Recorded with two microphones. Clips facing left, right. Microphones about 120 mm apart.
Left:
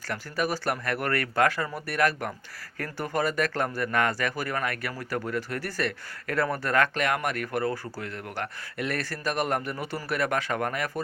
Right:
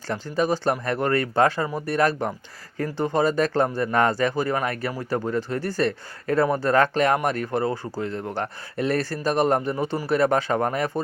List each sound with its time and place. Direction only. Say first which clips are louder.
0.1 s speech: right 6 dB; 25° right (ahead or behind)